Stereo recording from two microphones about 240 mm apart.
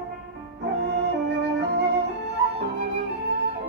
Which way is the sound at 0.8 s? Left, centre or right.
Right.